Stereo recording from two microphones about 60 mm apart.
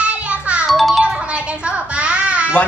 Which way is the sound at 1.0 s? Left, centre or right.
Centre.